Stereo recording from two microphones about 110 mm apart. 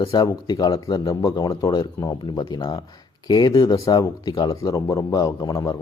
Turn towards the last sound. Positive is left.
turn(degrees=35)  # may be behind; listen again after turning